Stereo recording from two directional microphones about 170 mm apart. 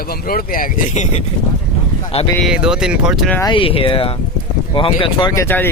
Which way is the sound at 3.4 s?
30° left (ahead or behind).